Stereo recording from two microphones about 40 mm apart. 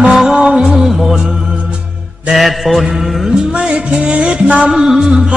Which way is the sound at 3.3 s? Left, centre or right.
Centre.